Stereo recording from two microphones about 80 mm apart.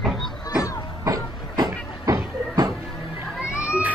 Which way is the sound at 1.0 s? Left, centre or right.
Right.